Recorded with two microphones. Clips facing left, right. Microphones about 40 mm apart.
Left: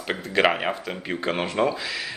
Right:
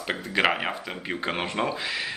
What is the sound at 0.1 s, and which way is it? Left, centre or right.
Speech, centre.